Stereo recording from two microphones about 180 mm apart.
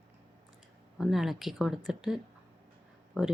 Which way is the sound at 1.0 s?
Centre (ahead or behind).